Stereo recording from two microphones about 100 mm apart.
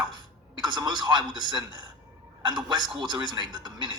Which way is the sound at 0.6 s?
50° right (ahead or behind).